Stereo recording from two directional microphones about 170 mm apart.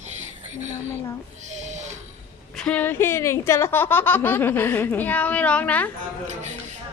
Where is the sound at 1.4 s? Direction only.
45° right (ahead or behind).